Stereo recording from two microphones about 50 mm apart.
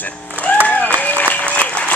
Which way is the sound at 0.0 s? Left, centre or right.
Left.